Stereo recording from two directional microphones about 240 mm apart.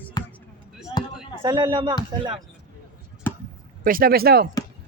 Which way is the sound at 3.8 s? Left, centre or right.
Right.